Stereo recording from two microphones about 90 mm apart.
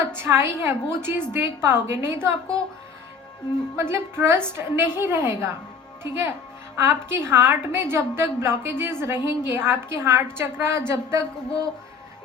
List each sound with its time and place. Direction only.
0.0 s a woman's voice: 25° right (ahead or behind)
3.8 s a woman's voice: 30° right (ahead or behind)